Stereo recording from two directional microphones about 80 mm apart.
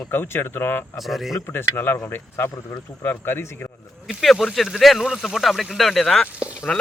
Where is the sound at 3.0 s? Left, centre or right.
Left.